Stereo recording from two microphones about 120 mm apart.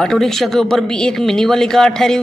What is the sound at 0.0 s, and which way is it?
Speech, 5° left (ahead or behind).